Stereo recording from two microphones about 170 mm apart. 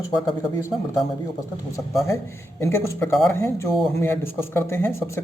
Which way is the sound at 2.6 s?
15° left (ahead or behind).